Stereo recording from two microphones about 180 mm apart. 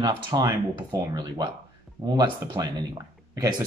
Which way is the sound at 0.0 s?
20° right (ahead or behind).